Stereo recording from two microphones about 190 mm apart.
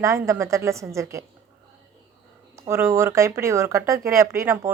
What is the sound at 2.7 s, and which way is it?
A woman's voice, 15° right (ahead or behind).